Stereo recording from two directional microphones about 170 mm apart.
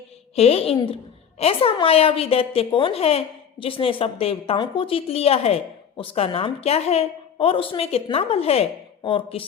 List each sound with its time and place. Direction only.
0.3 s a woman's voice: 35° left (ahead or behind)